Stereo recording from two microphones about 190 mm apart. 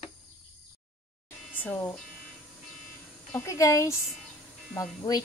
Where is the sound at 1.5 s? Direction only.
10° left (ahead or behind).